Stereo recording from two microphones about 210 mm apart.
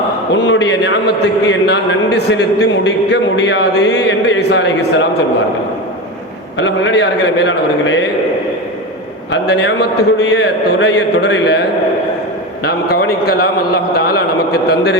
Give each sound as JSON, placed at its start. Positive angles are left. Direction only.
{"t": 0.3, "sound": "a man's voice", "side_deg": 55}
{"t": 6.6, "sound": "a man's voice", "side_deg": 60}
{"t": 9.3, "sound": "a man's voice", "side_deg": 55}
{"t": 13.2, "sound": "a man's voice", "side_deg": 50}